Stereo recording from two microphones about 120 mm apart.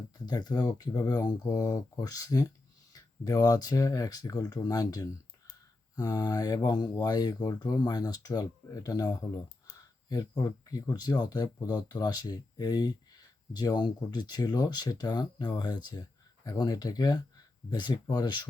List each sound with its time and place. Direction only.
0.3 s speech: 35° left (ahead or behind)